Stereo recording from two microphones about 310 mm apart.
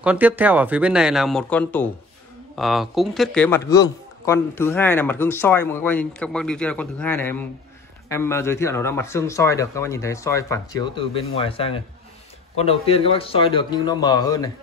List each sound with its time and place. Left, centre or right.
0.0 s a man's voice: centre